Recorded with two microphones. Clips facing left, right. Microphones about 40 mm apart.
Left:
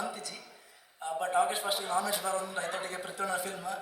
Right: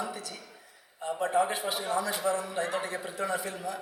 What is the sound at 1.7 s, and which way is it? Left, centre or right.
A man's voice, right.